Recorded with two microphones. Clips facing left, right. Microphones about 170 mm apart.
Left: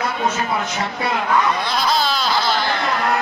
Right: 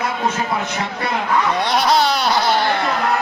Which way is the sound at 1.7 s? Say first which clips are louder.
Right 4 dB; 70° right (ahead or behind).